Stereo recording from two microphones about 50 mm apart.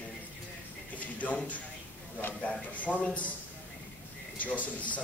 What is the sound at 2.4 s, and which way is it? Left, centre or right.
Speech, left.